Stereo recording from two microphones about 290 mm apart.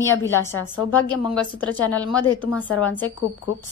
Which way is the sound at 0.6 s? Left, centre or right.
Centre.